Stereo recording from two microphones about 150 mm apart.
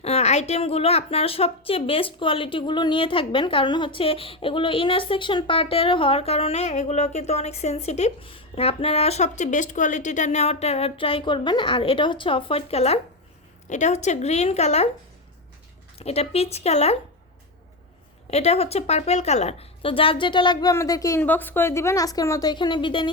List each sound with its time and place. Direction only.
0.0 s a woman's voice: 45° left (ahead or behind)
16.0 s a woman's voice: 45° left (ahead or behind)
18.3 s a woman's voice: 45° left (ahead or behind); by 21.2 s 25° left (ahead or behind)
21.2 s a woman's voice: 10° left (ahead or behind); by 23.1 s 35° left (ahead or behind)